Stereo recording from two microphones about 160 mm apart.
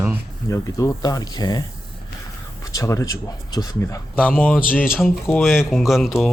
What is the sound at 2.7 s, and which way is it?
Speech, 20° left (ahead or behind).